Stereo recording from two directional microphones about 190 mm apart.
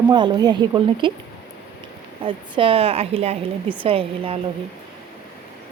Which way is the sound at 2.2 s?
25° right (ahead or behind).